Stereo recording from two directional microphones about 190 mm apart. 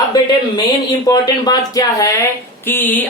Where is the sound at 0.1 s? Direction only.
20° left (ahead or behind).